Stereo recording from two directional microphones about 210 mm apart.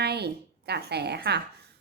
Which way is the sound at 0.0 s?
50° right (ahead or behind).